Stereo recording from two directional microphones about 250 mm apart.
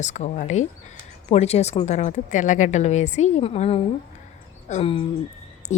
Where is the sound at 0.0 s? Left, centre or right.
Left.